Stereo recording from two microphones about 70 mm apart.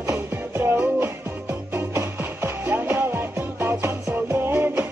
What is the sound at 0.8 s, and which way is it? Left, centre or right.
Music, right.